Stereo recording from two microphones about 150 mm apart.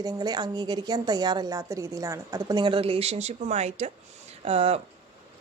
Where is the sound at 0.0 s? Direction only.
25° right (ahead or behind); by 4.8 s 40° right (ahead or behind).